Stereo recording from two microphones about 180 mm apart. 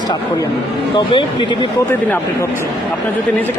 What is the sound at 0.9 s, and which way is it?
Speech, 25° left (ahead or behind).